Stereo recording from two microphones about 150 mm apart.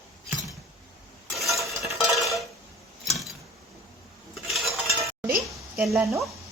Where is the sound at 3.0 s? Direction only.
Centre (ahead or behind).